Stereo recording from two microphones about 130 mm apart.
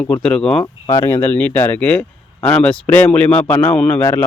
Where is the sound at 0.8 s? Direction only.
30° left (ahead or behind).